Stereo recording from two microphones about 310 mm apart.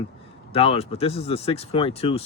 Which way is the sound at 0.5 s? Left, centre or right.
Centre.